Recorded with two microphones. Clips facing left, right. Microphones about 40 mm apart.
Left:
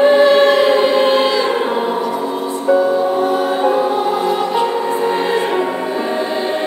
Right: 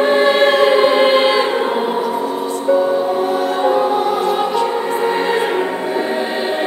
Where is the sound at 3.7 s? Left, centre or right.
Centre.